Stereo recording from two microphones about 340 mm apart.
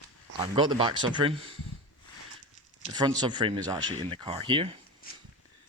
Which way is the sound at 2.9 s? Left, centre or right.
Centre.